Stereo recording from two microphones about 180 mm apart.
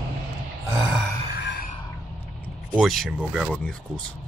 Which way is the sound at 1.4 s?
65° left (ahead or behind).